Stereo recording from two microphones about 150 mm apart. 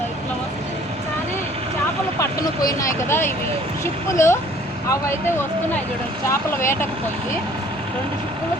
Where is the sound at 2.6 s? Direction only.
15° left (ahead or behind).